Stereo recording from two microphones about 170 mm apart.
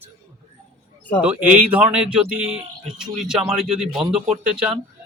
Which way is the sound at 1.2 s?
5° right (ahead or behind).